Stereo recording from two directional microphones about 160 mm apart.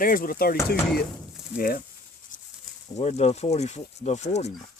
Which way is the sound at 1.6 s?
65° left (ahead or behind).